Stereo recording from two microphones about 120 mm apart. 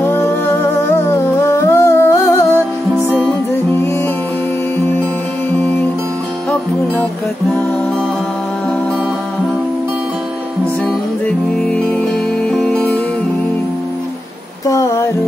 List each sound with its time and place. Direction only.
0.0 s music: 20° left (ahead or behind)
4.7 s music: 20° left (ahead or behind)
10.9 s music: 10° left (ahead or behind)
14.7 s music: 25° left (ahead or behind)